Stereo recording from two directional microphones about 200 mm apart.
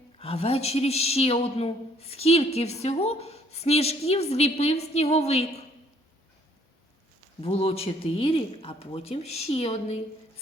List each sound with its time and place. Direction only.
0.2 s a woman's voice: 30° left (ahead or behind)
7.4 s speech: 30° left (ahead or behind)